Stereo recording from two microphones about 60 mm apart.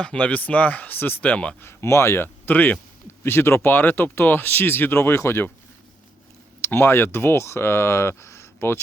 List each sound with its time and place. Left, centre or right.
0.2 s speech: left
1.2 s speech: left
1.6 s speech: left
3.2 s speech: left
6.6 s speech: left